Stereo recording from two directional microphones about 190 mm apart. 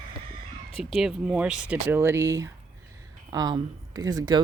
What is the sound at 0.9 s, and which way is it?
Speech, 5° right (ahead or behind).